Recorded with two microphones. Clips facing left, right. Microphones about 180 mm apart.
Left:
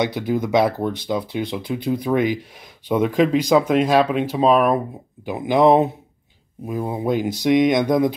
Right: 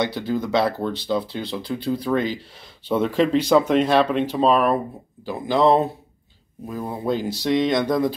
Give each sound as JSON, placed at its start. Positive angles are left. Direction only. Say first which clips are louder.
{"t": 0.0, "sound": "speech", "louder": "left 2 dB", "side_deg": 20}